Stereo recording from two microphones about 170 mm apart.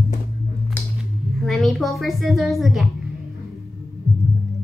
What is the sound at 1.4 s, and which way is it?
A woman's voice, centre (ahead or behind).